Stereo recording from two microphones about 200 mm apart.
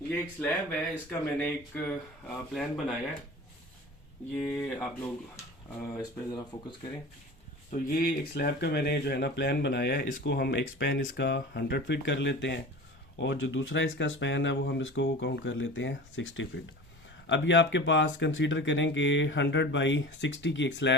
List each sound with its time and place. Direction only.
0.1 s speech: 10° left (ahead or behind)
4.4 s speech: 10° left (ahead or behind)
6.0 s speech: 25° left (ahead or behind)
7.7 s speech: 45° left (ahead or behind); by 20.9 s 60° left (ahead or behind)